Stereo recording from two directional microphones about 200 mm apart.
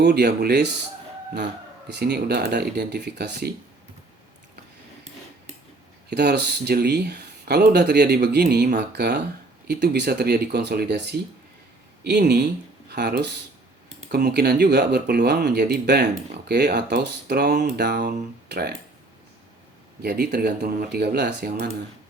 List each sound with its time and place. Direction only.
0.0 s speech: 55° right (ahead or behind)
1.9 s speech: 55° right (ahead or behind)
6.1 s speech: 55° right (ahead or behind)
12.0 s speech: 55° right (ahead or behind)
20.0 s speech: 50° right (ahead or behind)